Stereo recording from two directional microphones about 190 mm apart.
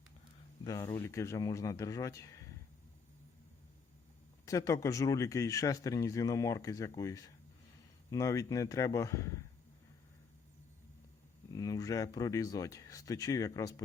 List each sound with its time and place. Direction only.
0.6 s speech: 15° left (ahead or behind)
4.4 s speech: 15° left (ahead or behind)
11.5 s speech: 20° left (ahead or behind)